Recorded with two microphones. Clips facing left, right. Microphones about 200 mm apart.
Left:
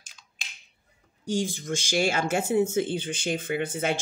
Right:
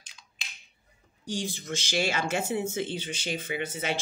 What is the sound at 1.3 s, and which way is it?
Speech, 50° left (ahead or behind).